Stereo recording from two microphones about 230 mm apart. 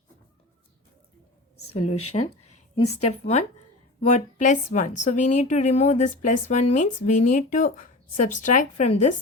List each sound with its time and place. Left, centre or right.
1.7 s speech: left
3.0 s a woman's voice: left